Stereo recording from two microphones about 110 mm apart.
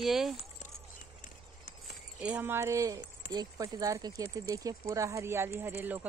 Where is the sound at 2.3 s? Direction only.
20° right (ahead or behind).